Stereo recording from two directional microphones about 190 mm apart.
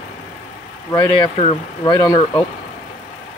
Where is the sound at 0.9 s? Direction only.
25° left (ahead or behind).